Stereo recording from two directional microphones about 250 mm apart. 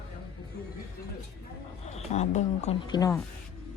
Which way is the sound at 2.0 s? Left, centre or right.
Left.